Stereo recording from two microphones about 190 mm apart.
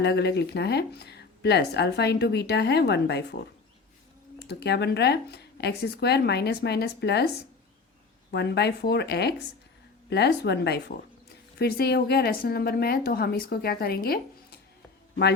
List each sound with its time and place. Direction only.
0.0 s speech: 60° left (ahead or behind)
4.4 s speech: 60° left (ahead or behind)
8.3 s a woman's voice: 60° left (ahead or behind)